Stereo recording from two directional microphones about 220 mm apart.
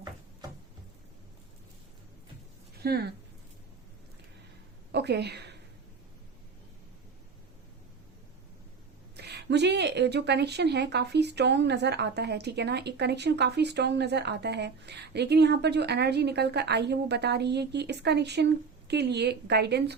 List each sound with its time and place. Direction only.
2.8 s speech: 45° right (ahead or behind)
4.9 s a sound: 50° right (ahead or behind)
9.1 s speech: 50° right (ahead or behind)